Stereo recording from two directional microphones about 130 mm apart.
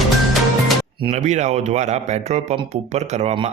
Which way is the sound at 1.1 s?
65° right (ahead or behind).